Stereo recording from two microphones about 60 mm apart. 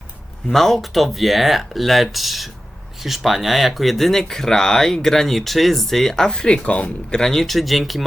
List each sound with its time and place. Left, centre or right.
0.4 s speech: centre; by 7.2 s left
7.2 s speech: centre